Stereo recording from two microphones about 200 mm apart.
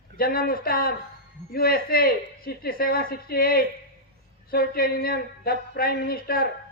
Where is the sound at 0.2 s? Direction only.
45° left (ahead or behind).